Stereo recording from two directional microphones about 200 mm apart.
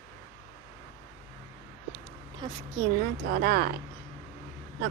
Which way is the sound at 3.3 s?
50° right (ahead or behind).